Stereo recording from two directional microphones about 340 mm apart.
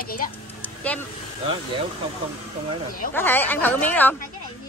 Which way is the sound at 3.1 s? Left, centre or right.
Centre.